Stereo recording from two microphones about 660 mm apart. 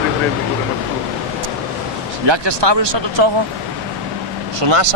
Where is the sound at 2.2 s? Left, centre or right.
Right.